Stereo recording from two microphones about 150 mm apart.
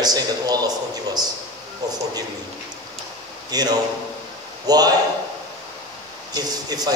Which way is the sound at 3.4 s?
25° right (ahead or behind).